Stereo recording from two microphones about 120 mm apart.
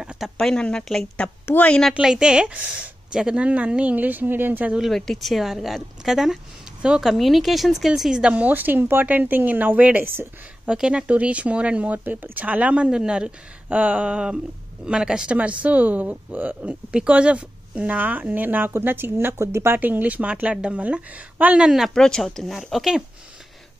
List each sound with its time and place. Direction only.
0.0 s a sound: 5° right (ahead or behind)
0.4 s a woman's voice: 5° left (ahead or behind)
1.8 s speech: centre (ahead or behind)
4.8 s speech: 5° left (ahead or behind)